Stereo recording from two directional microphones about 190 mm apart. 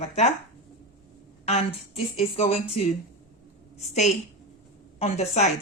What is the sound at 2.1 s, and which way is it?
A woman's voice, 30° left (ahead or behind).